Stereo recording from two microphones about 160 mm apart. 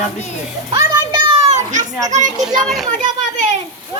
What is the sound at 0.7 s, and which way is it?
Children playing, 30° right (ahead or behind).